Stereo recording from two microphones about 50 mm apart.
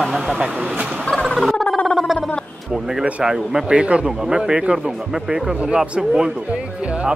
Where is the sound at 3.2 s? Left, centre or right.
Centre.